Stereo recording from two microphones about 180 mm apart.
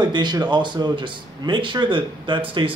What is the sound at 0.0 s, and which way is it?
Speech, 25° right (ahead or behind).